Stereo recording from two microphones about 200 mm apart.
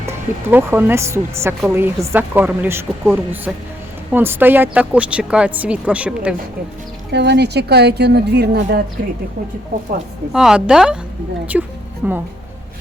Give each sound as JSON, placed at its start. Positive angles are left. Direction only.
{"t": 0.0, "sound": "speech", "side_deg": -15}
{"t": 7.1, "sound": "speech", "side_deg": -60}
{"t": 10.3, "sound": "speech", "side_deg": -5}